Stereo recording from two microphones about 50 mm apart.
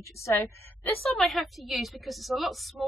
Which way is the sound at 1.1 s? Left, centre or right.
Centre.